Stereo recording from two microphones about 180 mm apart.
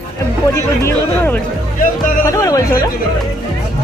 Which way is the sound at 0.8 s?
10° left (ahead or behind).